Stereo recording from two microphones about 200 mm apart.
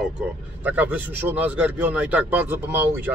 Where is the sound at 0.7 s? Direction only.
10° right (ahead or behind).